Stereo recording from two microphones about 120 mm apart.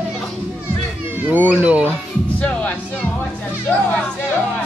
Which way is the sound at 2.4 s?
10° left (ahead or behind).